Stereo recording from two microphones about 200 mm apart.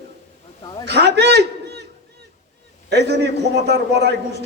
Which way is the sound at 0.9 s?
55° right (ahead or behind).